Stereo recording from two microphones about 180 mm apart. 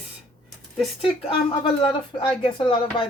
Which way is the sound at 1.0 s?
30° left (ahead or behind).